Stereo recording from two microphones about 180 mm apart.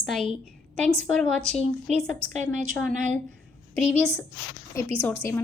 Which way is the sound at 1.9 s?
40° right (ahead or behind).